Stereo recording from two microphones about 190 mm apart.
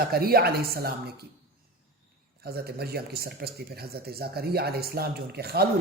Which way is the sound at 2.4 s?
55° right (ahead or behind).